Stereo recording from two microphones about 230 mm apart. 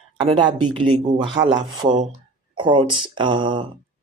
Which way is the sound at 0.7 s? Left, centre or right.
Right.